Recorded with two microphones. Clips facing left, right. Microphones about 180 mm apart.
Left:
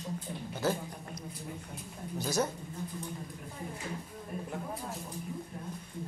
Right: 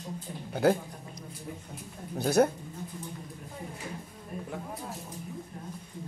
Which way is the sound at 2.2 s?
60° right (ahead or behind).